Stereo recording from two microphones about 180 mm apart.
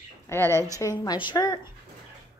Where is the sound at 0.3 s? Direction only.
15° left (ahead or behind).